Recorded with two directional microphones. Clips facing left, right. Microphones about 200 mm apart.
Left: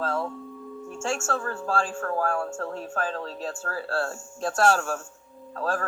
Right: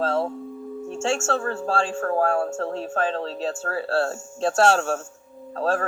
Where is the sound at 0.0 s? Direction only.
25° right (ahead or behind).